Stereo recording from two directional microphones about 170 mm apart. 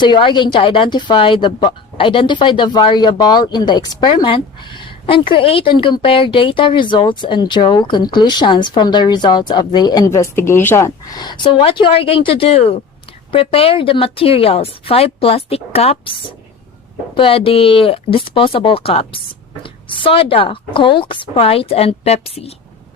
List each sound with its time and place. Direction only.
0.0 s a woman's voice: 25° left (ahead or behind)